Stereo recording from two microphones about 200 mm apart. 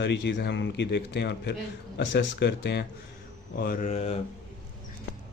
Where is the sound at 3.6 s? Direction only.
45° left (ahead or behind).